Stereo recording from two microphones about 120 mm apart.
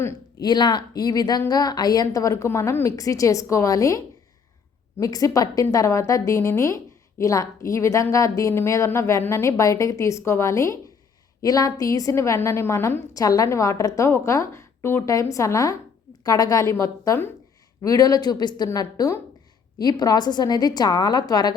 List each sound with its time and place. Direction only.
0.4 s a woman's voice: 40° left (ahead or behind)